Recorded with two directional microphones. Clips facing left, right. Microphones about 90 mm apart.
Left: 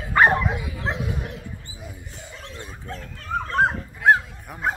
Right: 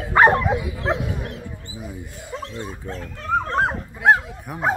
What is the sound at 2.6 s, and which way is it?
Speech, 25° right (ahead or behind).